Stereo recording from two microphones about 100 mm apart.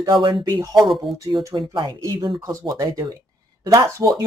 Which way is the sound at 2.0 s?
35° right (ahead or behind).